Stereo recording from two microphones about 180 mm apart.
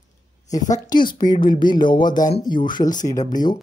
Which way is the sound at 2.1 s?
45° left (ahead or behind).